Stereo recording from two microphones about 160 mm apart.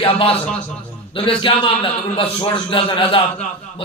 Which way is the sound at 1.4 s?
30° left (ahead or behind).